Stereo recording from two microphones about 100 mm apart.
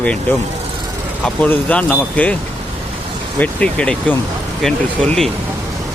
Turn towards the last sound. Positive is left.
turn(degrees=5)  # may be behind; listen again after turning